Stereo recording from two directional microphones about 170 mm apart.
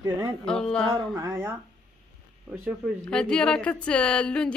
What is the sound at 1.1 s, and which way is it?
Speech, 15° right (ahead or behind).